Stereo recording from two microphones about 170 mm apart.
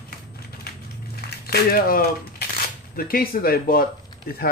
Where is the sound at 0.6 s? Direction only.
70° left (ahead or behind).